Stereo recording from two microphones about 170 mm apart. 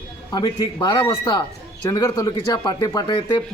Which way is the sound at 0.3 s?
25° left (ahead or behind).